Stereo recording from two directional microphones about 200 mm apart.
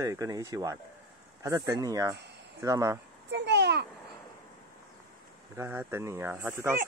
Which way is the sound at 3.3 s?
55° right (ahead or behind).